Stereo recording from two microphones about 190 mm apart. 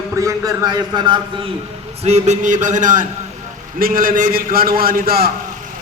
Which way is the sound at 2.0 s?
35° right (ahead or behind).